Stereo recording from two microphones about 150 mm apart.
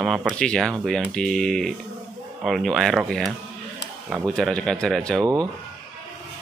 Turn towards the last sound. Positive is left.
turn(degrees=-25)  # may be behind; listen again after turning